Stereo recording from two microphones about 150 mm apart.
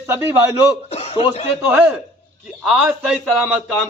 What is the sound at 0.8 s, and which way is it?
Chuckle, 40° left (ahead or behind).